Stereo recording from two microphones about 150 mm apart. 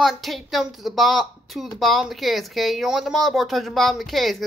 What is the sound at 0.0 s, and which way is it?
A woman's voice, centre (ahead or behind).